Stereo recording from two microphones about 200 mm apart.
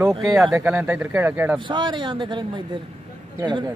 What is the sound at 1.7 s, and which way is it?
A man's voice, 25° right (ahead or behind).